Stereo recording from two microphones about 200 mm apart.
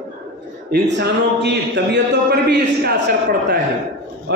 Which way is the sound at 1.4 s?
60° right (ahead or behind).